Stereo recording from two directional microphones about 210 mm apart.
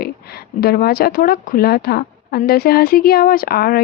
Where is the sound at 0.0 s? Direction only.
45° left (ahead or behind).